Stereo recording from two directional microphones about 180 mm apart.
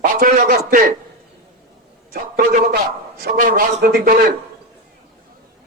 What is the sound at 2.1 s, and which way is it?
A man's voice, 55° right (ahead or behind).